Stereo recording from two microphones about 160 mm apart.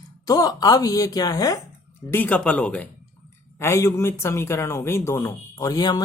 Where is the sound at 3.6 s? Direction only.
20° left (ahead or behind).